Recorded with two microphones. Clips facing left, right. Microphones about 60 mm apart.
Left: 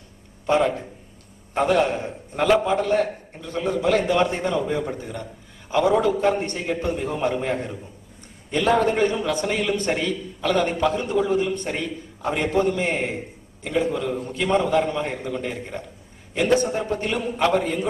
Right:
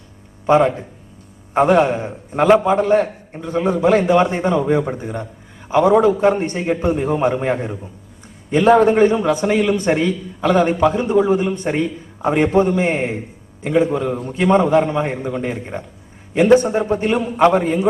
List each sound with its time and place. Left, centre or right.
0.5 s a man's voice: right